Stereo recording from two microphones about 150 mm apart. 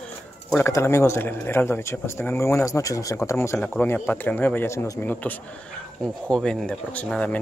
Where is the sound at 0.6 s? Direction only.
20° left (ahead or behind).